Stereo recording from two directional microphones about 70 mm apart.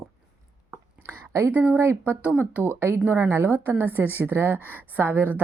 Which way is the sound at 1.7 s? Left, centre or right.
Right.